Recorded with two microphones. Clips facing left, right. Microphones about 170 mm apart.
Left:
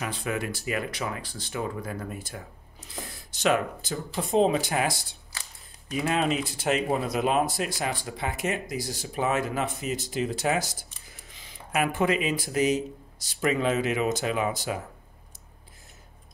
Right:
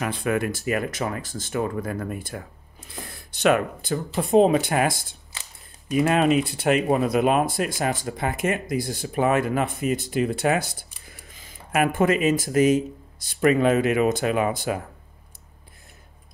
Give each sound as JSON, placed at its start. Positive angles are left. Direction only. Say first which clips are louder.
{"t": 0.0, "sound": "speech", "louder": "right 6 dB", "side_deg": -55}
{"t": 5.3, "sound": "camera", "louder": "right 1 dB", "side_deg": -20}
{"t": 6.0, "sound": "speech", "louder": "right 5 dB", "side_deg": -60}